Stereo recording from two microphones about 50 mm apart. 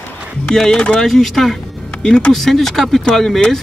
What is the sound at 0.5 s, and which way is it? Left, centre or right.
Speech, centre.